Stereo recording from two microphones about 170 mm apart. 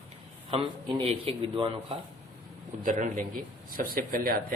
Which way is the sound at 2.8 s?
50° right (ahead or behind).